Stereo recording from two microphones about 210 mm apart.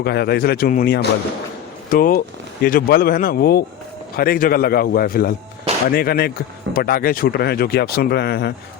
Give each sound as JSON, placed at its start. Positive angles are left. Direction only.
{"t": 0.0, "sound": "speech", "side_deg": 50}